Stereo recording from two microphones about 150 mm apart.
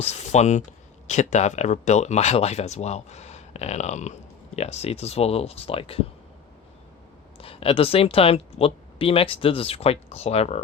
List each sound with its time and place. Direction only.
0.1 s speech: 50° left (ahead or behind)
7.3 s speech: 40° left (ahead or behind)